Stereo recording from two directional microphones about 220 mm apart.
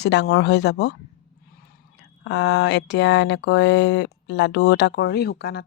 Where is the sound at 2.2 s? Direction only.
50° left (ahead or behind).